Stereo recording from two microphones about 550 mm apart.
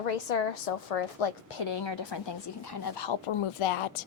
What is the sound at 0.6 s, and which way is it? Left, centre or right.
A woman's voice, left.